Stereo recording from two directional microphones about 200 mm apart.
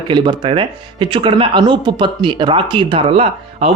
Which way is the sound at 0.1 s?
25° right (ahead or behind).